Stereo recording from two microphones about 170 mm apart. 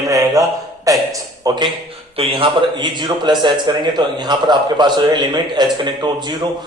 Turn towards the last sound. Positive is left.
turn(degrees=-25)  # may be behind; listen again after turning